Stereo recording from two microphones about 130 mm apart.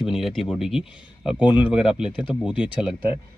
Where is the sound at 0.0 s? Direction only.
Centre (ahead or behind).